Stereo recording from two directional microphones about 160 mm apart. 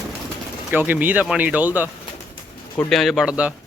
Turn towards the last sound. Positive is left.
turn(degrees=-5)  # may be behind; listen again after turning